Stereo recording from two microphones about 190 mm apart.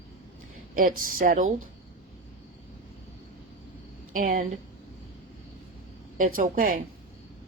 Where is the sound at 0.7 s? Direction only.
45° right (ahead or behind).